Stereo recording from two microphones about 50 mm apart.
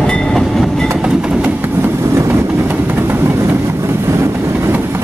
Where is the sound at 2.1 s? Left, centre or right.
Right.